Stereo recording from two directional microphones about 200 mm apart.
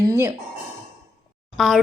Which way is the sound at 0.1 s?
15° right (ahead or behind).